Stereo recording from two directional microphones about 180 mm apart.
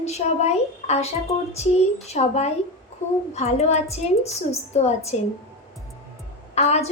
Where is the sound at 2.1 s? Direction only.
40° left (ahead or behind).